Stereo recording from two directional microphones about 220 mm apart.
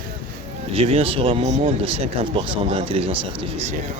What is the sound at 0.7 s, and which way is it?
Speech, 25° right (ahead or behind).